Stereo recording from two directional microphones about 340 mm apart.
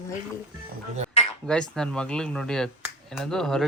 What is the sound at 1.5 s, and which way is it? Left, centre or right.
Speech, centre.